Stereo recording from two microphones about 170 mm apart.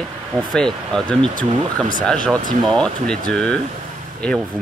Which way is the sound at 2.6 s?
5° left (ahead or behind).